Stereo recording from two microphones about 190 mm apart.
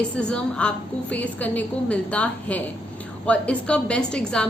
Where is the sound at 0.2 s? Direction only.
5° left (ahead or behind).